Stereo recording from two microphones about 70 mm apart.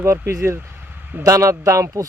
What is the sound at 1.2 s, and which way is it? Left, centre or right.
Speech, right.